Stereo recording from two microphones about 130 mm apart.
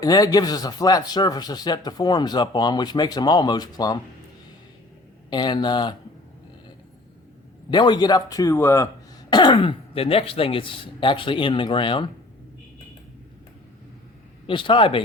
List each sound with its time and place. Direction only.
0.0 s speech: 30° left (ahead or behind)
5.3 s speech: 35° left (ahead or behind)
7.7 s a man's voice: 35° left (ahead or behind)
9.3 s speech: 35° left (ahead or behind)
14.4 s speech: 40° left (ahead or behind)